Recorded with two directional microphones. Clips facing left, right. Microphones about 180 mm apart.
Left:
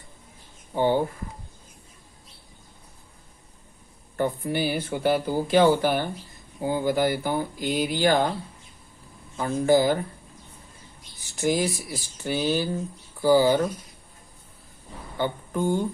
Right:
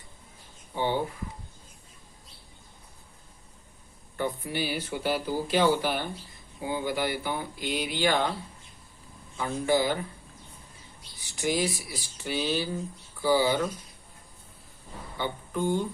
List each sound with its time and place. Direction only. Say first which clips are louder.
0.8 s speech: left 6 dB; 45° left (ahead or behind)
4.2 s speech: left 5 dB; 50° left (ahead or behind)
9.4 s speech: left 5 dB; 40° left (ahead or behind)
11.2 s speech: left 4 dB; 45° left (ahead or behind)
15.2 s speech: left 4 dB; 45° left (ahead or behind)